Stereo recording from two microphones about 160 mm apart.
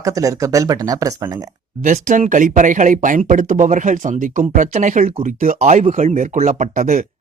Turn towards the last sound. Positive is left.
turn(degrees=-50)  # may be behind; listen again after turning